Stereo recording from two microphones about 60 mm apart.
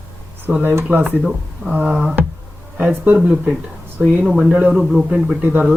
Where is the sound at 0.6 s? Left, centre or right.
Right.